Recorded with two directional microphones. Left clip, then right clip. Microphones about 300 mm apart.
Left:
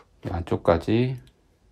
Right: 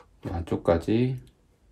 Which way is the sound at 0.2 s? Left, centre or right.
Left.